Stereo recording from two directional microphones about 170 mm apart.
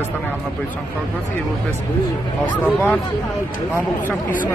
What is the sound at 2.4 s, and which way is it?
Speech, 10° left (ahead or behind).